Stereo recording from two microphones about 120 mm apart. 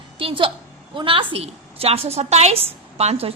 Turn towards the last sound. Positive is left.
turn(degrees=-60)  # may be behind; listen again after turning